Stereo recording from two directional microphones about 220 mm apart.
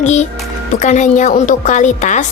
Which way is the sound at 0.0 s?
30° left (ahead or behind).